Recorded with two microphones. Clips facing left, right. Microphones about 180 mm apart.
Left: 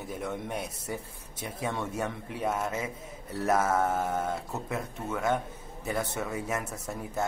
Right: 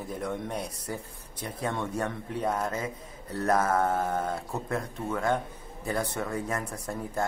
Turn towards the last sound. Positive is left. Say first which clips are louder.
# right 1 dB
turn(degrees=5)  # may be behind; listen again after turning